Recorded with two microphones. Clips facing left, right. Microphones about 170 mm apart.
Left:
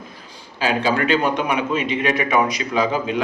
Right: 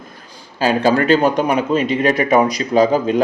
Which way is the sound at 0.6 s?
45° right (ahead or behind).